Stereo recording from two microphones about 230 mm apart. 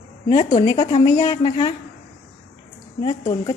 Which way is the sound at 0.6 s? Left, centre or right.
Centre.